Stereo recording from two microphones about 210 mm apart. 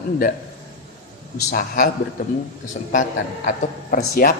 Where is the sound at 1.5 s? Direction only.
40° left (ahead or behind).